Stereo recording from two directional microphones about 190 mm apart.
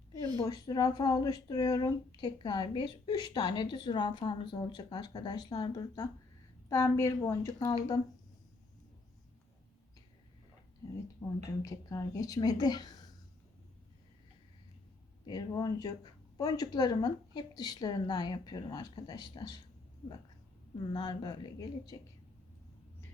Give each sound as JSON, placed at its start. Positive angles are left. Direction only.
{"t": 0.1, "sound": "a woman's voice", "side_deg": 20}
{"t": 11.6, "sound": "a woman's voice", "side_deg": 15}
{"t": 15.3, "sound": "a woman's voice", "side_deg": 20}
{"t": 20.9, "sound": "a woman's voice", "side_deg": 20}